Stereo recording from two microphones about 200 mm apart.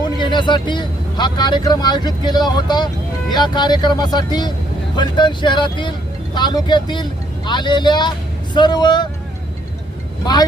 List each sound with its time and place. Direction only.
0.0 s speech: 25° left (ahead or behind)